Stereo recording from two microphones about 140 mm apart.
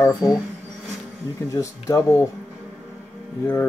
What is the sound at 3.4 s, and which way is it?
Speech, 15° left (ahead or behind).